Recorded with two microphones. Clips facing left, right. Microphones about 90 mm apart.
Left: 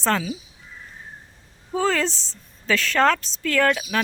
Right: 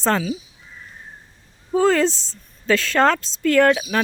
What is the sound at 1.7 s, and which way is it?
Speech, 10° right (ahead or behind).